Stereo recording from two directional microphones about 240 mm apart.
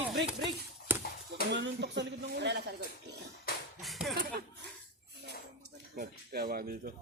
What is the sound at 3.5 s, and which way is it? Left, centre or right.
Music, left.